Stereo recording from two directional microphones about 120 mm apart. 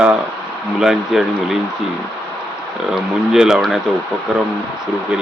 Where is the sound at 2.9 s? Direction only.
5° right (ahead or behind).